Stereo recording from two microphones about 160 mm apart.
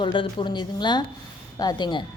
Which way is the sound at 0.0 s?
30° left (ahead or behind).